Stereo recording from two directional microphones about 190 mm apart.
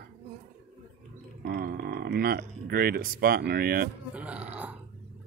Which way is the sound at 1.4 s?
60° right (ahead or behind).